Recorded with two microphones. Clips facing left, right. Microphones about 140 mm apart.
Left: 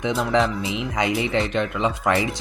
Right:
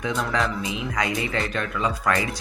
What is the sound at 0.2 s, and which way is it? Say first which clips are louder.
Speech: left 6 dB; 25° left (ahead or behind).